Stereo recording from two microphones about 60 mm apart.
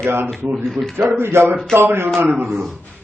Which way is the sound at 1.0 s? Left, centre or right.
Right.